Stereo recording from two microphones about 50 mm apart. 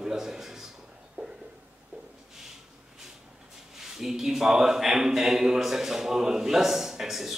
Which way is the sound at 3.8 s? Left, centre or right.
Centre.